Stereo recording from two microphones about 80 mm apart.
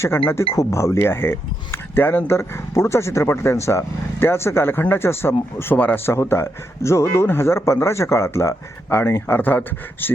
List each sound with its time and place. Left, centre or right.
0.5 s speech: left